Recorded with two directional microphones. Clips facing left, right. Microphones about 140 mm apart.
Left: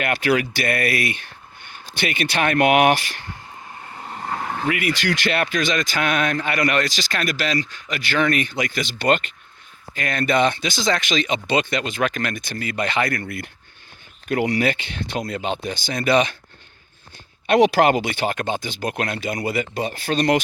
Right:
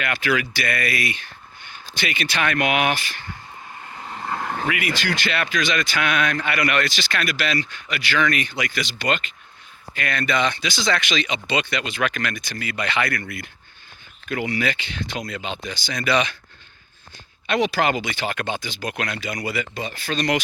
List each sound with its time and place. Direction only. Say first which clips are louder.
0.0 s speech: left 3 dB; 50° left (ahead or behind)
4.0 s vehicle: even; 10° left (ahead or behind)
5.3 s a man's voice: left 1 dB; 45° left (ahead or behind)
9.9 s speech: left 3 dB; 40° left (ahead or behind)
17.6 s speech: left 6 dB; 60° left (ahead or behind)